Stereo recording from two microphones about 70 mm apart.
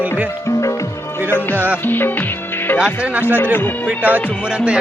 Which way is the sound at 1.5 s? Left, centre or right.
Right.